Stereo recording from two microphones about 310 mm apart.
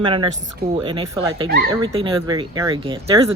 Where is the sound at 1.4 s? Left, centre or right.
Right.